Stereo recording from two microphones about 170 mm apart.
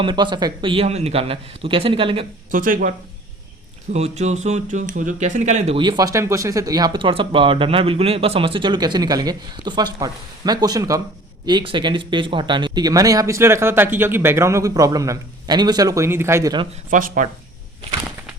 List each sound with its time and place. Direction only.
0.0 s speech: 25° right (ahead or behind)
2.5 s speech: 55° right (ahead or behind)
3.9 s speech: 40° right (ahead or behind); by 16.6 s 20° right (ahead or behind)
16.9 s speech: 50° right (ahead or behind)